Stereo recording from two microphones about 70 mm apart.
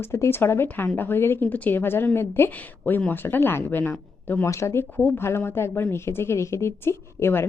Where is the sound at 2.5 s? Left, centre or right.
Left.